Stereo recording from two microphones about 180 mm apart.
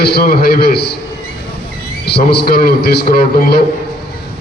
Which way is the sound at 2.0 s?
65° left (ahead or behind).